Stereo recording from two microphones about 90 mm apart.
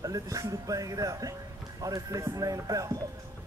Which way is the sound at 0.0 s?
40° right (ahead or behind).